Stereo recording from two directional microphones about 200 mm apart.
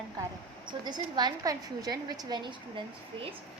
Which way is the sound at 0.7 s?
20° right (ahead or behind).